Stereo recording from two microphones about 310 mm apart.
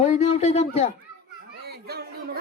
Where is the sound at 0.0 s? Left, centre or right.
Centre.